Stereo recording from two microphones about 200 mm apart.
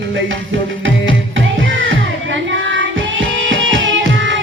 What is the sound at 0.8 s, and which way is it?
Music, 70° right (ahead or behind).